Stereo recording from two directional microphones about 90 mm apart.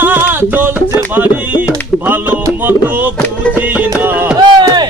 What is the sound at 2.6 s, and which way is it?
Music, 20° right (ahead or behind).